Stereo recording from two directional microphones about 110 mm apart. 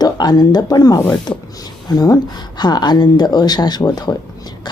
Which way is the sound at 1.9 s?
35° left (ahead or behind).